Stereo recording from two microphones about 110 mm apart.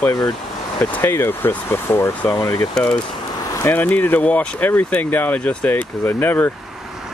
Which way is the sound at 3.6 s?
15° left (ahead or behind).